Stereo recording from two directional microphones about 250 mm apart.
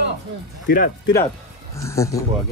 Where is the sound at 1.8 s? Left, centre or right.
Centre.